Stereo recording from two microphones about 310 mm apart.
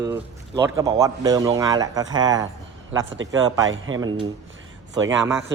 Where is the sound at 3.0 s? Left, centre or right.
Right.